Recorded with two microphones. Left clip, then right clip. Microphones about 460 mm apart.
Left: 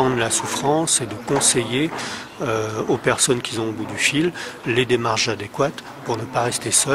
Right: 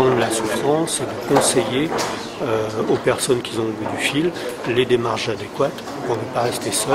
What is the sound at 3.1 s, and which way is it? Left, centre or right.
Speech, left.